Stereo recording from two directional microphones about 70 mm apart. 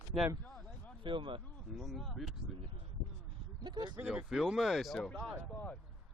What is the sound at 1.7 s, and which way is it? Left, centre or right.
Speech, centre.